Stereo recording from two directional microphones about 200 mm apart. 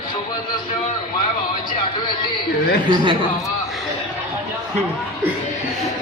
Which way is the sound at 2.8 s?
25° right (ahead or behind).